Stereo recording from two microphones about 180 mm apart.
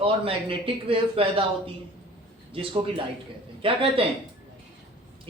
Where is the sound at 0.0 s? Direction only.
30° right (ahead or behind).